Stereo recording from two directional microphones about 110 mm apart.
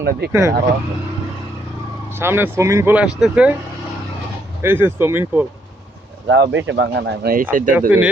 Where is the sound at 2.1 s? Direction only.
20° right (ahead or behind).